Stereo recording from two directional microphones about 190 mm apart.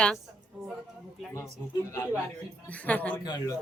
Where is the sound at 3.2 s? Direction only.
20° left (ahead or behind).